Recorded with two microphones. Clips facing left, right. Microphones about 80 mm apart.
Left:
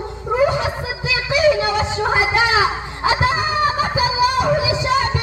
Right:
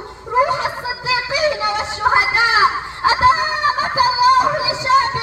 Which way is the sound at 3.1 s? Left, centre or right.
Right.